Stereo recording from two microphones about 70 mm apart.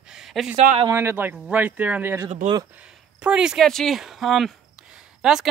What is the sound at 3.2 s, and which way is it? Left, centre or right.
Speech, centre.